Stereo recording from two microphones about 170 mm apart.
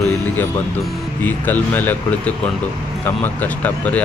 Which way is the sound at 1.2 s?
10° left (ahead or behind).